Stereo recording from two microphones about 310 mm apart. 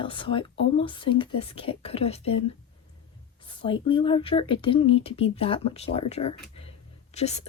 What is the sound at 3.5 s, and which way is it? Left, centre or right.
Speech, centre.